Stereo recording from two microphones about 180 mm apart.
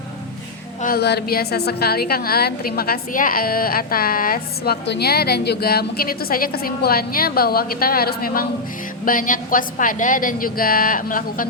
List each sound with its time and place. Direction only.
0.8 s a woman's voice: 55° left (ahead or behind)